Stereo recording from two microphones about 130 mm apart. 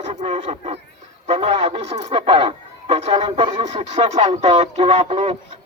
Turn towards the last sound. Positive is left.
turn(degrees=-55)  # may be behind; listen again after turning